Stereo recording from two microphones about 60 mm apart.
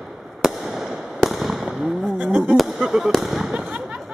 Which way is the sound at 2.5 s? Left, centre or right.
Centre.